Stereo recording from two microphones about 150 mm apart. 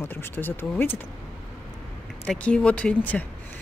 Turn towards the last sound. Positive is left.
turn(degrees=10)  # may be behind; listen again after turning